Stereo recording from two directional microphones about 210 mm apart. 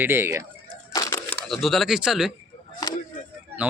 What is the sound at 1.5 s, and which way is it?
Speech, centre (ahead or behind).